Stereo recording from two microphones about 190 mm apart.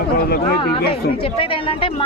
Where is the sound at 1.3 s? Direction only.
30° left (ahead or behind).